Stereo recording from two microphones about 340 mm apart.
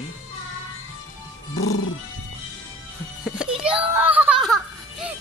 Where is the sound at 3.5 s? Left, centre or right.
Centre.